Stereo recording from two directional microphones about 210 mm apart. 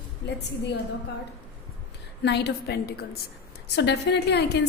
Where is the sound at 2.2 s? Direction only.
55° left (ahead or behind).